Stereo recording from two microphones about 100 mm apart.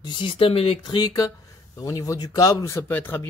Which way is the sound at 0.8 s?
45° left (ahead or behind).